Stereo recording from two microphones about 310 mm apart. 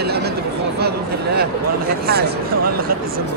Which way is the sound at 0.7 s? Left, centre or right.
Right.